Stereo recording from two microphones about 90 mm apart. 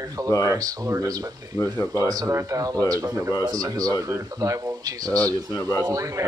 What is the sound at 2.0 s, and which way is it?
Speech, 40° right (ahead or behind).